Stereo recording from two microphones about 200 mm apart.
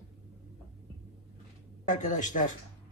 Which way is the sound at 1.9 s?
40° left (ahead or behind).